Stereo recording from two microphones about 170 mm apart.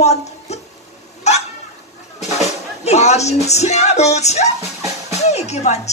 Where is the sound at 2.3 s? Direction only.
40° left (ahead or behind).